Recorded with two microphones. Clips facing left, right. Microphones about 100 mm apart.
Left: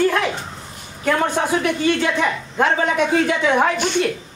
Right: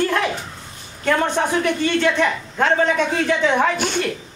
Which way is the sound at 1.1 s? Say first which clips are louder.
Even; 10° left (ahead or behind).